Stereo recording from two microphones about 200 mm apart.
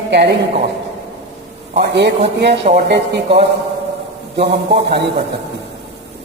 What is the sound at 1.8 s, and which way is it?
Speech, 55° right (ahead or behind).